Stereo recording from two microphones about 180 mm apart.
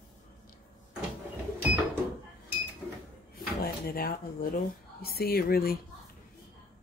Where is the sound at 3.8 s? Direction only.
55° left (ahead or behind).